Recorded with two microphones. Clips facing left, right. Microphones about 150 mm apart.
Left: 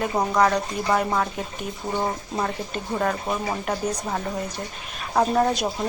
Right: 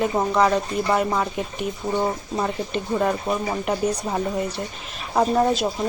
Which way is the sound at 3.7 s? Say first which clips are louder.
Right 5 dB; 10° right (ahead or behind).